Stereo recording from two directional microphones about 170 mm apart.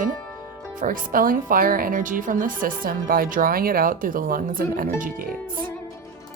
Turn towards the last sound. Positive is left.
turn(degrees=-55)  # may be behind; listen again after turning